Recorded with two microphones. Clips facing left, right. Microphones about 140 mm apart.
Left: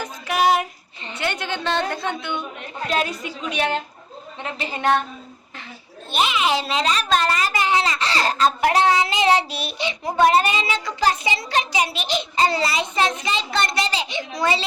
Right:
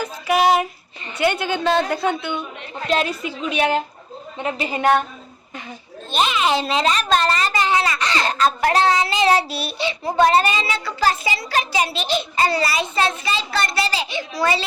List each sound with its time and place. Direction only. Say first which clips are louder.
0.0 s a sound: right 3 dB; 5° right (ahead or behind)
1.2 s a woman's voice: right 6 dB; 10° right (ahead or behind)
3.5 s a woman's voice: right 4 dB; 5° right (ahead or behind)
6.1 s speech: right 2 dB; 10° left (ahead or behind)
7.8 s a child's voice: right 1 dB; 25° left (ahead or behind)
8.6 s a child's voice: even; 15° left (ahead or behind)